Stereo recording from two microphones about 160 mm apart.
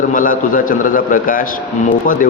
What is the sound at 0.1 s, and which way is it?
A man's voice, 55° left (ahead or behind).